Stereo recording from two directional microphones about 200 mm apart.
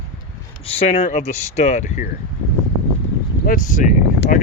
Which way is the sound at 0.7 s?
30° left (ahead or behind).